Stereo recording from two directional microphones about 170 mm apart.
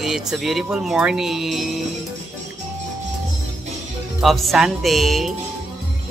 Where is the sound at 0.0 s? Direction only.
Centre (ahead or behind).